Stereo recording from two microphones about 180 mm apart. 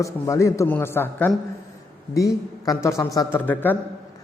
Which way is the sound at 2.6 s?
20° left (ahead or behind).